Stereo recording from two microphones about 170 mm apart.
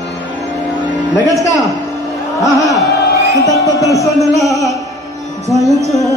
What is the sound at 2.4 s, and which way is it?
Music, 20° left (ahead or behind).